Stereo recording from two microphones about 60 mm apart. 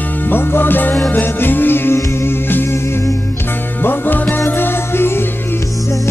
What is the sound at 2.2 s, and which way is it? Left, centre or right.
Music, left.